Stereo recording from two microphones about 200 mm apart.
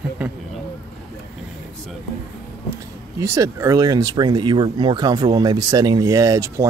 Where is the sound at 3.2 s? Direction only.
15° right (ahead or behind).